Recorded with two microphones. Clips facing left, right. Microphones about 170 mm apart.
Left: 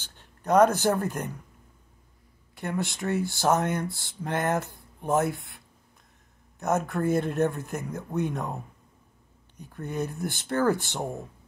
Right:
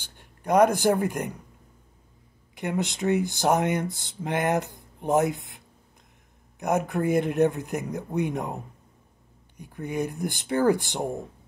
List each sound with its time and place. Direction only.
0.0 s speech: 15° right (ahead or behind)
2.5 s speech: 20° right (ahead or behind)
6.6 s speech: 15° right (ahead or behind)